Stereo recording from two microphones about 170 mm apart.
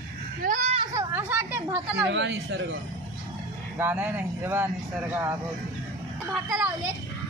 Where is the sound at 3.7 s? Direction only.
10° right (ahead or behind).